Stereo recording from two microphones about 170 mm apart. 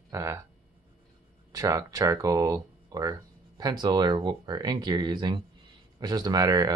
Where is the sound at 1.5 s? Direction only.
20° right (ahead or behind).